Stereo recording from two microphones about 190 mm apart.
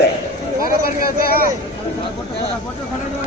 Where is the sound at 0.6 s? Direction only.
50° left (ahead or behind).